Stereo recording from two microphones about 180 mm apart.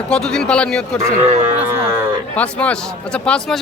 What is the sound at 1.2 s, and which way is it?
Speech, 35° right (ahead or behind).